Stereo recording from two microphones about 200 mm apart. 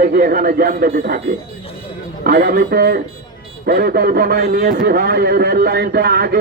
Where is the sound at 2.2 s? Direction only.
50° right (ahead or behind).